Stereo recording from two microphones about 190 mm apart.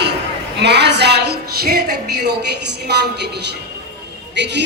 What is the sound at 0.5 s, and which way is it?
A woman's voice, 65° right (ahead or behind).